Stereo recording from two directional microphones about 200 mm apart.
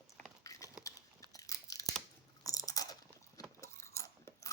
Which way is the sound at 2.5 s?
15° left (ahead or behind).